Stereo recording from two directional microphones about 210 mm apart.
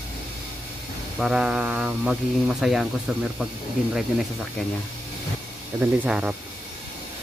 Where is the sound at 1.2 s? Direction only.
5° right (ahead or behind).